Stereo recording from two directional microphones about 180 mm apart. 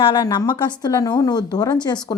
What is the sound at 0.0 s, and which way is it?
Speech, 25° left (ahead or behind).